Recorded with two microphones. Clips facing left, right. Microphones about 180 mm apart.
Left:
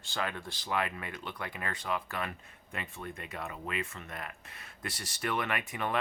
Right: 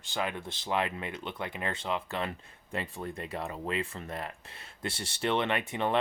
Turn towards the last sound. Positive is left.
turn(degrees=-25)  # may be behind; listen again after turning